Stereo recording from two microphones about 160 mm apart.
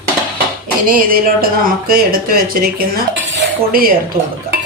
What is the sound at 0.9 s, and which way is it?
Speech, 65° right (ahead or behind).